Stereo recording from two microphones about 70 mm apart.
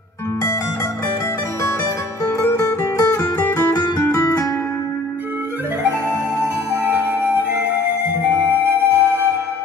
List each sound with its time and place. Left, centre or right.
2.3 s music: left
6.7 s music: right
8.5 s music: right